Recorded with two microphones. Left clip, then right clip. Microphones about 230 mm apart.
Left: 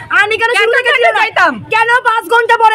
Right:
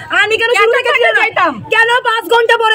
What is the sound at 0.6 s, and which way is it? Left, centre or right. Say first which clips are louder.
A woman's voice: left 1 dB; left.